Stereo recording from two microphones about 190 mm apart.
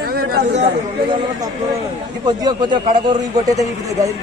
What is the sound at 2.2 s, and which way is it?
A man's voice, 20° right (ahead or behind).